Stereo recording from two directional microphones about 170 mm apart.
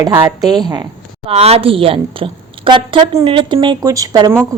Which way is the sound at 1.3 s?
35° right (ahead or behind).